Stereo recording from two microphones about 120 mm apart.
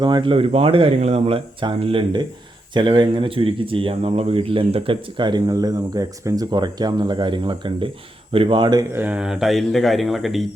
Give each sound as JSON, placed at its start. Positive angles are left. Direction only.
{"t": 0.0, "sound": "speech", "side_deg": -40}
{"t": 8.9, "sound": "speech", "side_deg": -15}